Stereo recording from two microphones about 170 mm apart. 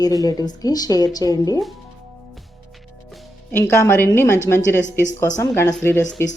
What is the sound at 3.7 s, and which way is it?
A woman's voice, 15° left (ahead or behind).